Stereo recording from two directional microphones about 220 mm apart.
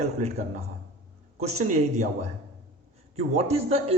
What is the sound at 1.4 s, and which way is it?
Speech, 35° right (ahead or behind).